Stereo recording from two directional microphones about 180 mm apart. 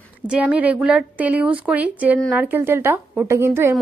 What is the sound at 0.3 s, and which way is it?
A woman's voice, 5° right (ahead or behind).